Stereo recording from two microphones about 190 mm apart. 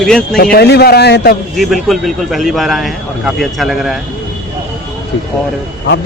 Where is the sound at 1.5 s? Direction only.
Centre (ahead or behind).